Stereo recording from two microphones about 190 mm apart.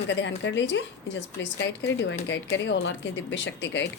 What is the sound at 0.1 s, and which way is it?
A woman's voice, 70° left (ahead or behind).